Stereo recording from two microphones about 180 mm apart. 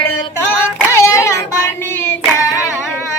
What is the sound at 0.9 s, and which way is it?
Child singing, 15° left (ahead or behind).